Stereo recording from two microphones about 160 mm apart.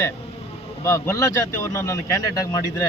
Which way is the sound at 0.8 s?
20° left (ahead or behind).